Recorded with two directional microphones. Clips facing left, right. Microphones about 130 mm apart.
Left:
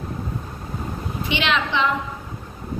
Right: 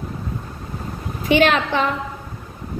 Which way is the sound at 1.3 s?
45° right (ahead or behind).